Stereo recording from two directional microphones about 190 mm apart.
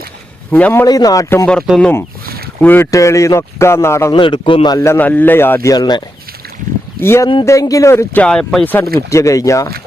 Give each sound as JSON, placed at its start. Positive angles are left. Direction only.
{"t": 0.5, "sound": "a man's voice", "side_deg": 10}
{"t": 1.5, "sound": "a man's voice", "side_deg": 0}
{"t": 4.1, "sound": "a man's voice", "side_deg": 25}
{"t": 7.0, "sound": "a man's voice", "side_deg": 15}